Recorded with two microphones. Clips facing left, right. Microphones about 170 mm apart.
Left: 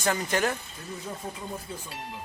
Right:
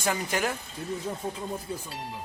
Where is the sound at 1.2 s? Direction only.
30° right (ahead or behind).